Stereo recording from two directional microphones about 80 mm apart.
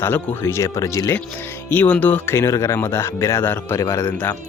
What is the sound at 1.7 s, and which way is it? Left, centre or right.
Speech, left.